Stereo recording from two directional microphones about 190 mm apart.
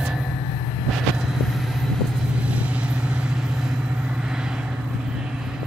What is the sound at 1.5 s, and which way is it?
Vehicle, centre (ahead or behind).